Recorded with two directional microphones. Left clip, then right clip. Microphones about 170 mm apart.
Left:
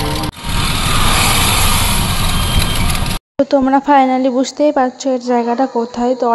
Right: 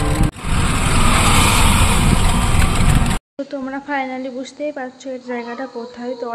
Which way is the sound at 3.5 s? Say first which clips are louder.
Left 13 dB; 35° left (ahead or behind).